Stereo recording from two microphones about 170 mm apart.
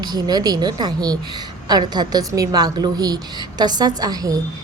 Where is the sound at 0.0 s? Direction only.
25° right (ahead or behind).